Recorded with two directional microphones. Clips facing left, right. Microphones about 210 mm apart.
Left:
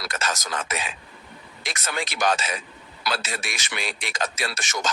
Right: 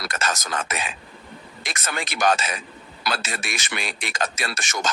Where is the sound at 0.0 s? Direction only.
50° right (ahead or behind).